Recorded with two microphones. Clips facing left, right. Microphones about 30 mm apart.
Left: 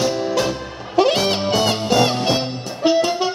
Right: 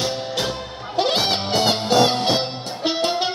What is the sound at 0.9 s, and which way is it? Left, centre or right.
Music, right.